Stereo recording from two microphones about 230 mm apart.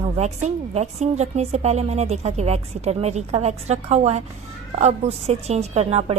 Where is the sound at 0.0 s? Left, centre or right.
Right.